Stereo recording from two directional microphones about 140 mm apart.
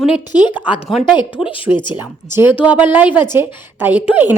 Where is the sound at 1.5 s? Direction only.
35° left (ahead or behind).